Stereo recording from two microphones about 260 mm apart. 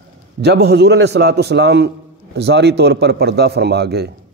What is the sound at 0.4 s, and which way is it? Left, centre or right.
Speech, right.